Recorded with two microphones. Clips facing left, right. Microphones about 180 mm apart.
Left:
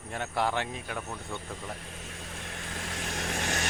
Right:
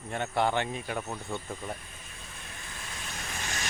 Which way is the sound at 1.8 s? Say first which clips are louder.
Left 6 dB; 80° left.